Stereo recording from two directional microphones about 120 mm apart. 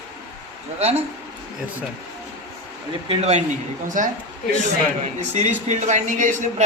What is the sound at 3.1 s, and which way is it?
Speech, 65° right (ahead or behind).